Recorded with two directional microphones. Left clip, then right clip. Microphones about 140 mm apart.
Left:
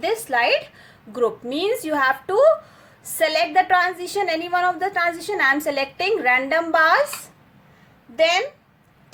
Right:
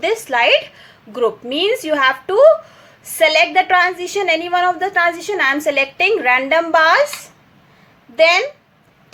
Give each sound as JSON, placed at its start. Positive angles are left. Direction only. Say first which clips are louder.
{"t": 0.0, "sound": "a woman's voice", "louder": "right 5 dB", "side_deg": -20}